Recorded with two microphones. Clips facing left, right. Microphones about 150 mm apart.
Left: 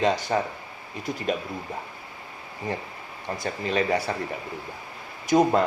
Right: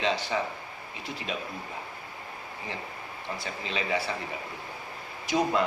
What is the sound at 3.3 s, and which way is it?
Speech, 45° left (ahead or behind).